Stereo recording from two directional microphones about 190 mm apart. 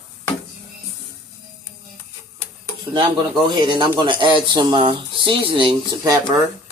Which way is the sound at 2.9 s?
25° right (ahead or behind).